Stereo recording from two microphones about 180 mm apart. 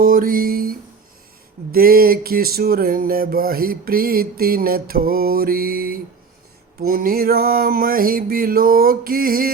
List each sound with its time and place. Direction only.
0.0 s guitar: 50° right (ahead or behind)
1.7 s a sound: 55° right (ahead or behind)
6.7 s music: 55° right (ahead or behind)